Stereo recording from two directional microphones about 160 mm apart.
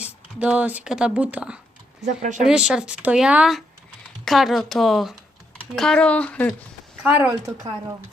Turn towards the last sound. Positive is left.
turn(degrees=-10)  # may be behind; listen again after turning